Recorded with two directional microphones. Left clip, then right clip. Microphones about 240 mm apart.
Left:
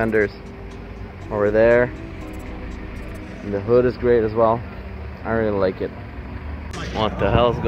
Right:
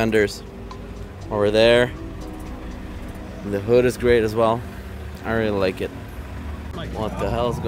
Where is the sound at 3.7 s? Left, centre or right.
Centre.